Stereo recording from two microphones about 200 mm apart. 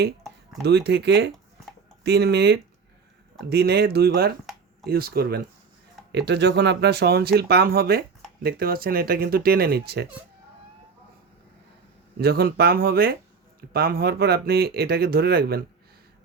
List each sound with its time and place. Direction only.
0.6 s speech: 55° right (ahead or behind)
12.2 s speech: 50° right (ahead or behind)